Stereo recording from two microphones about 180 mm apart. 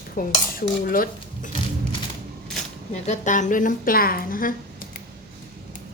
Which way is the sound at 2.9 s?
40° left (ahead or behind).